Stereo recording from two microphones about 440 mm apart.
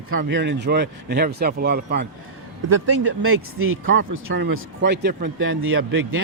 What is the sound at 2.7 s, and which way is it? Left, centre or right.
A man's voice, right.